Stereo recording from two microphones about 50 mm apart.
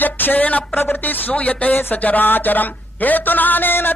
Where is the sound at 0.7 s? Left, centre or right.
Left.